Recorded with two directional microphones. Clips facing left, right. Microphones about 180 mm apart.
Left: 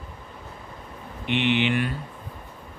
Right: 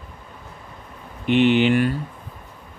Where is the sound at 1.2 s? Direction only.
40° right (ahead or behind).